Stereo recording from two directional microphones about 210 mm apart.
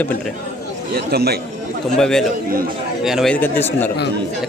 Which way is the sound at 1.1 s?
50° right (ahead or behind).